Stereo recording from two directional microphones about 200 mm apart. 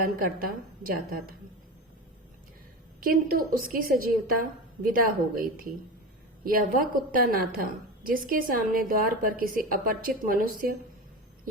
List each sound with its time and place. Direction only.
0.2 s a woman's voice: 45° right (ahead or behind)
3.0 s a woman's voice: 45° right (ahead or behind)